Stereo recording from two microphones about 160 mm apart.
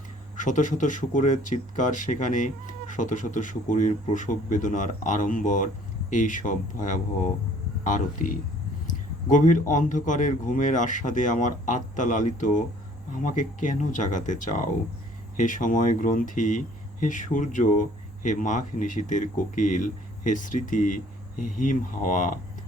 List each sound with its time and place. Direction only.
0.3 s speech: 55° left (ahead or behind)